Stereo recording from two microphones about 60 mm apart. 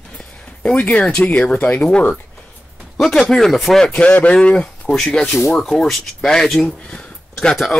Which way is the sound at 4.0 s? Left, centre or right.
Left.